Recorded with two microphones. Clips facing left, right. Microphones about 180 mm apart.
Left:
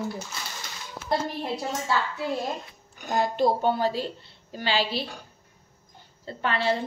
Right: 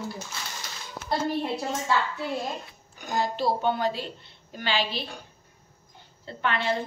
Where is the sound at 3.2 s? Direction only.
45° left (ahead or behind).